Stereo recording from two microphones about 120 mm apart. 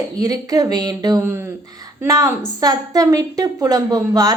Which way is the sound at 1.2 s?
20° right (ahead or behind).